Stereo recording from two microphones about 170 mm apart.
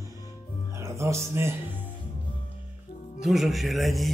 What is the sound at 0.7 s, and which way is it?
Music, 15° right (ahead or behind).